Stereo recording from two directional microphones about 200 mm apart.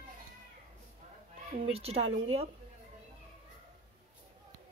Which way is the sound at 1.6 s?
30° right (ahead or behind).